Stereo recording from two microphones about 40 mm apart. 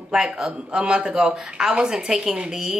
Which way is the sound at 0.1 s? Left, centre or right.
Centre.